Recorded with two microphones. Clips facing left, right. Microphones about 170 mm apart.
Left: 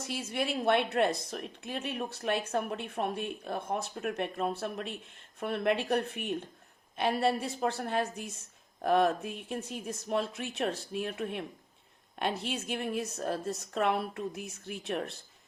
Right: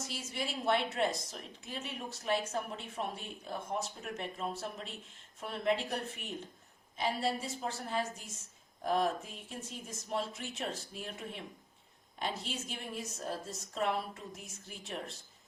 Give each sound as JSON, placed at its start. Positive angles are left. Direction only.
{"t": 0.0, "sound": "a woman's voice", "side_deg": 60}